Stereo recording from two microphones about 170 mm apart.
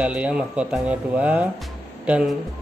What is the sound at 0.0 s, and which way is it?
A man's voice, 5° right (ahead or behind).